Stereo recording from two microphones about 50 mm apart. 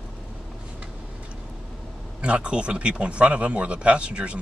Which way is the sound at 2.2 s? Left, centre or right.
Right.